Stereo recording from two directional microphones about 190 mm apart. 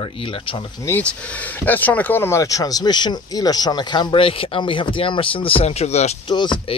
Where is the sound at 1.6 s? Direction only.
10° left (ahead or behind).